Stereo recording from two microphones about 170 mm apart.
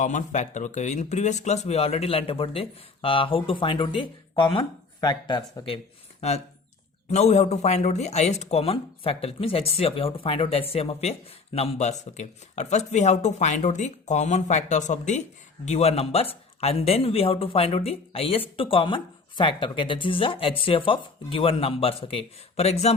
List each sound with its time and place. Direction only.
0.0 s speech: 45° left (ahead or behind)